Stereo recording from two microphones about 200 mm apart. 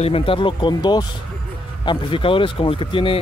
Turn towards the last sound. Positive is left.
turn(degrees=25)  # may be behind; listen again after turning